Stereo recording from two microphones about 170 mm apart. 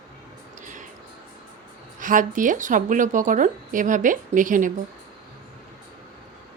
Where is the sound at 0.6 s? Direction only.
50° right (ahead or behind).